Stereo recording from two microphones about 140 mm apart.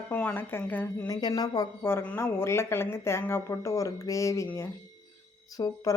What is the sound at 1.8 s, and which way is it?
Speech, 15° left (ahead or behind).